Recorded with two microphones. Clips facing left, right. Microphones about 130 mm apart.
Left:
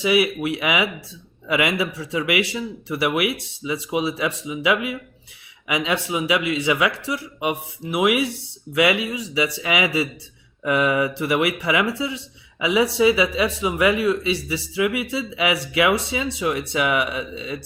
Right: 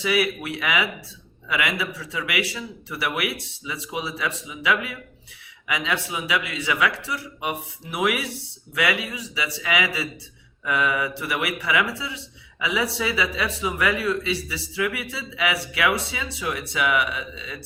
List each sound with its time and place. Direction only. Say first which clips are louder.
0.0 s speech: left 4 dB; 15° left (ahead or behind)